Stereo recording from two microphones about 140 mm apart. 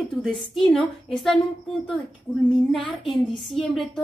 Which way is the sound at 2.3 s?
15° left (ahead or behind).